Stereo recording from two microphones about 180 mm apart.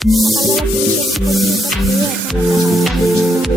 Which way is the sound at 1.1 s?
Centre (ahead or behind).